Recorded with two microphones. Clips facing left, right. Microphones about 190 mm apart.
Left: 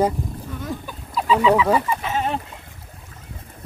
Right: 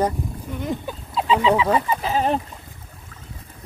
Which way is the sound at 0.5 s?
20° right (ahead or behind).